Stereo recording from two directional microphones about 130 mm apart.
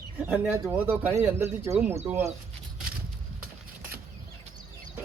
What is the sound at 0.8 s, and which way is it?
A man's voice, 15° right (ahead or behind).